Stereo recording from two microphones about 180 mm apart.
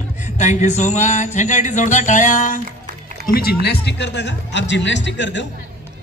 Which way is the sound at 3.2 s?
55° left (ahead or behind).